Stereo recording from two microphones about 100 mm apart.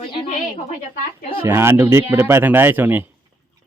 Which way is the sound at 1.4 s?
25° right (ahead or behind).